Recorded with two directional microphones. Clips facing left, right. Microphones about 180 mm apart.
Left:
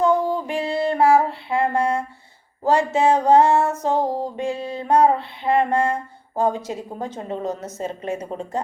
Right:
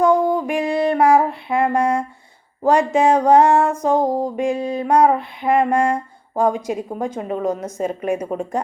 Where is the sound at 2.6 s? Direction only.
15° right (ahead or behind).